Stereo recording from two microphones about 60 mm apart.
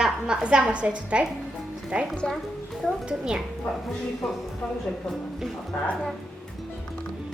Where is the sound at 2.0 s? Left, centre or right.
Centre.